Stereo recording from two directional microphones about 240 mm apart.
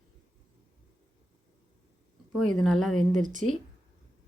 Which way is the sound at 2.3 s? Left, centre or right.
Centre.